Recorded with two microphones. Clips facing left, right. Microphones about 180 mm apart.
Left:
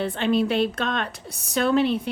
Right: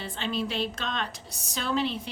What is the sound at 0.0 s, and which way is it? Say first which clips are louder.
Speech: left 9 dB; 55° left (ahead or behind).